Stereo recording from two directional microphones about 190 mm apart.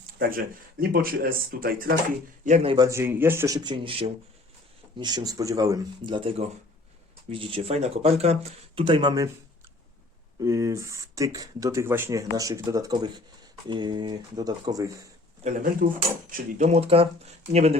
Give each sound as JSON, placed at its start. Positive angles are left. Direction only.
{"t": 0.2, "sound": "speech", "side_deg": -50}
{"t": 2.4, "sound": "speech", "side_deg": -40}
{"t": 2.7, "sound": "speech", "side_deg": -15}
{"t": 10.4, "sound": "speech", "side_deg": -15}
{"t": 15.4, "sound": "speech", "side_deg": -40}